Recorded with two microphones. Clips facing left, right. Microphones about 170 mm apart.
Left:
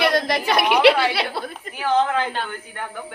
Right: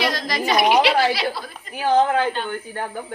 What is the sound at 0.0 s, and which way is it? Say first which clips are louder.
A woman's voice: left 3 dB; 55° left (ahead or behind).